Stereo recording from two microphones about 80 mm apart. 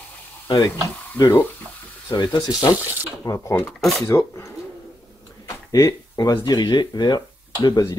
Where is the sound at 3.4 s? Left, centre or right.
Left.